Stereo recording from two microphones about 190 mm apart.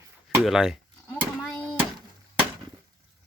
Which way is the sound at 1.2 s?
Centre (ahead or behind).